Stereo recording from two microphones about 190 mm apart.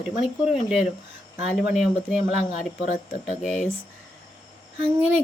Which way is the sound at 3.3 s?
40° left (ahead or behind).